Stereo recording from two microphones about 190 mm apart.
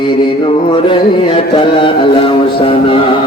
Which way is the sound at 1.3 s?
25° left (ahead or behind).